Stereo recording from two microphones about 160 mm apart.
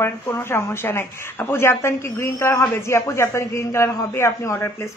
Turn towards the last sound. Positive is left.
turn(degrees=15)  # may be behind; listen again after turning